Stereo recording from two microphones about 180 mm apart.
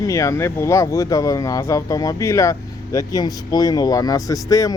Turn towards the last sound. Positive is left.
turn(degrees=20)  # may be behind; listen again after turning